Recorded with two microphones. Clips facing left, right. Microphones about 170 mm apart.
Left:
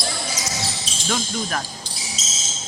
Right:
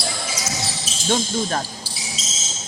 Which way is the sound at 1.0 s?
30° right (ahead or behind).